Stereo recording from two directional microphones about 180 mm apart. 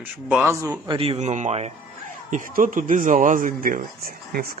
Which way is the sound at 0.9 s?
30° right (ahead or behind).